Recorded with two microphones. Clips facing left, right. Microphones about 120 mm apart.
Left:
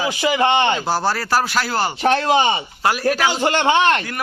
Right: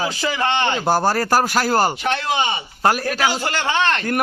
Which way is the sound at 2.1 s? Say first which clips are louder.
Left 5 dB; 30° left (ahead or behind).